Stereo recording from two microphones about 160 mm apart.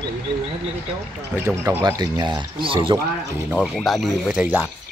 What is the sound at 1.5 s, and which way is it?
Speech, 15° right (ahead or behind).